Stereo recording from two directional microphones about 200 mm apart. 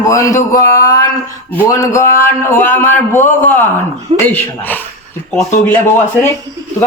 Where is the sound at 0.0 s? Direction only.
15° left (ahead or behind).